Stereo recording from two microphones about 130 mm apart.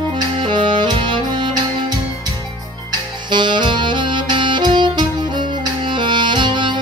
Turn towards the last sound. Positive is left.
turn(degrees=-35)  # may be behind; listen again after turning